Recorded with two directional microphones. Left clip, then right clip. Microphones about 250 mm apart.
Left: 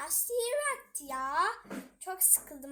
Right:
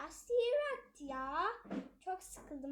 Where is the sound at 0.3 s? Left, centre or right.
Left.